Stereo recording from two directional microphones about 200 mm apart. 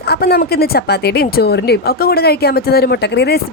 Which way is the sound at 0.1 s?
50° left (ahead or behind).